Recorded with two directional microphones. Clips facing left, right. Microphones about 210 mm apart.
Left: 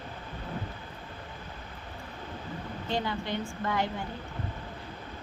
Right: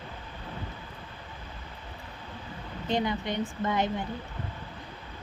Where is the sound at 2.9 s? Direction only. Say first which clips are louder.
Right 3 dB; 20° right (ahead or behind).